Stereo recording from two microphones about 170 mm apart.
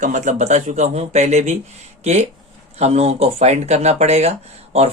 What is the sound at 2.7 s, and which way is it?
Speech, 40° right (ahead or behind).